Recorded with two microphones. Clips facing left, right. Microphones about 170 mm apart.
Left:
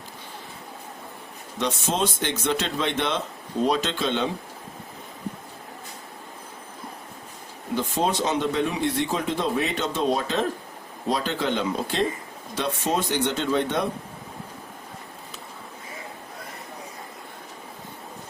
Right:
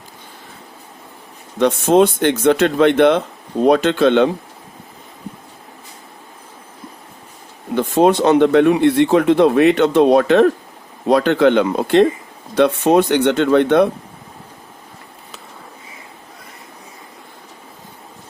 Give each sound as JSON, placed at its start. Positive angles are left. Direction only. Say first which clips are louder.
{"t": 1.5, "sound": "speech", "louder": "right 13 dB", "side_deg": -55}
{"t": 7.8, "sound": "speech", "louder": "right 12 dB", "side_deg": -60}